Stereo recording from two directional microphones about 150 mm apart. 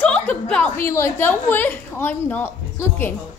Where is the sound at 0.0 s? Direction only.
10° left (ahead or behind).